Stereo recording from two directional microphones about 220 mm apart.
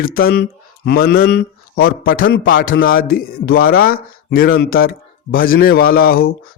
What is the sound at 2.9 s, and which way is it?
A man's voice, 40° left (ahead or behind).